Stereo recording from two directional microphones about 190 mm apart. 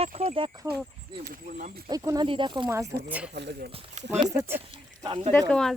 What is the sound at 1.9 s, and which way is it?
Speech, 20° right (ahead or behind).